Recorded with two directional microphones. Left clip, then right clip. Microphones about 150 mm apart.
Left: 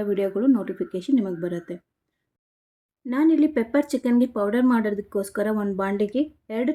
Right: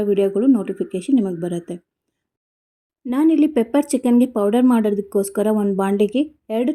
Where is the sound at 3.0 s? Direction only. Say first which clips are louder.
Right 3 dB; 40° right (ahead or behind).